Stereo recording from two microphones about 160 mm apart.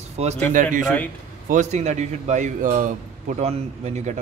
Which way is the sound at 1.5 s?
45° right (ahead or behind).